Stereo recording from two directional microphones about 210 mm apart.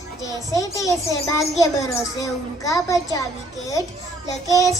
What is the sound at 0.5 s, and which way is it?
A child's voice, 15° left (ahead or behind).